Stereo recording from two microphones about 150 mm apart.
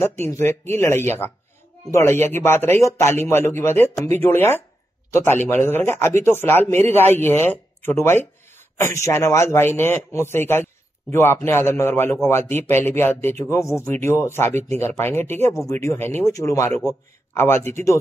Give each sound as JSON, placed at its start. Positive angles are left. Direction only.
{"t": 0.0, "sound": "speech", "side_deg": 15}